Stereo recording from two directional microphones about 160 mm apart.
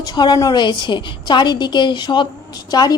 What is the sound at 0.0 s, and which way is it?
A woman's voice, 25° left (ahead or behind).